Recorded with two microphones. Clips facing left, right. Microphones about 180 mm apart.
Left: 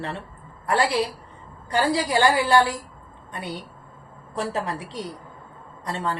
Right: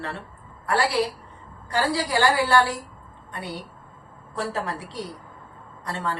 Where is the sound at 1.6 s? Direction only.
20° left (ahead or behind).